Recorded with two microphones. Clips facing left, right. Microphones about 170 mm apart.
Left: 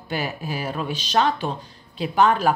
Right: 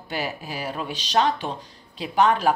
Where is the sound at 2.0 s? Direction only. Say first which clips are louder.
Left 1 dB; 35° left (ahead or behind).